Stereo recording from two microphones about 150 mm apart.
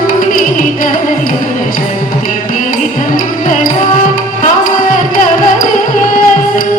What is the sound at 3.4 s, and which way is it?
Music, 60° left (ahead or behind).